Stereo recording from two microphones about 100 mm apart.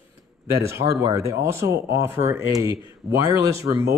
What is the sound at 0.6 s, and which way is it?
Speech, 30° right (ahead or behind).